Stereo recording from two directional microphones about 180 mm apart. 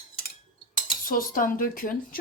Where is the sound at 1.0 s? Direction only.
50° left (ahead or behind).